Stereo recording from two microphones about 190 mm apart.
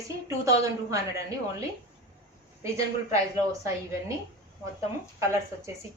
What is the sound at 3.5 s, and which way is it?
Speech, 15° right (ahead or behind).